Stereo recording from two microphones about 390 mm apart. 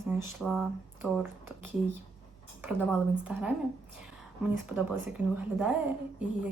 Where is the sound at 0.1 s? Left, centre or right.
Centre.